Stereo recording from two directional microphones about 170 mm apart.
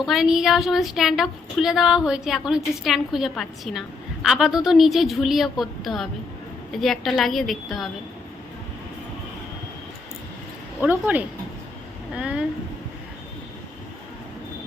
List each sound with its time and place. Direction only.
0.0 s a woman's voice: centre (ahead or behind)
10.8 s a woman's voice: 10° right (ahead or behind)